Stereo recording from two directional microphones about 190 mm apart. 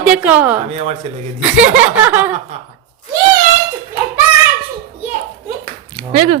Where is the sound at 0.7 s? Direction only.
35° right (ahead or behind).